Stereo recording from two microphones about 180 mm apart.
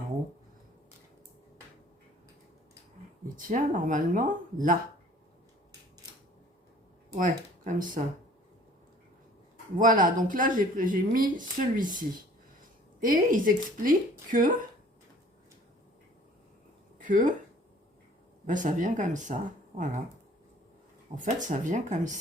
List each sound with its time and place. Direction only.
3.2 s speech: 50° right (ahead or behind)
7.2 s speech: 50° right (ahead or behind)
9.7 s speech: 50° right (ahead or behind)
13.0 s speech: 50° right (ahead or behind)
17.0 s speech: 45° right (ahead or behind)
18.4 s speech: 45° right (ahead or behind)
21.2 s speech: 45° right (ahead or behind)